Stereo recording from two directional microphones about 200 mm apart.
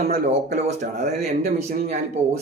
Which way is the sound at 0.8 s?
35° right (ahead or behind).